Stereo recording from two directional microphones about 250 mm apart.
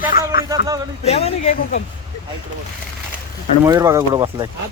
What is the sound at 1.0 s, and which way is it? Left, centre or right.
Speech, left.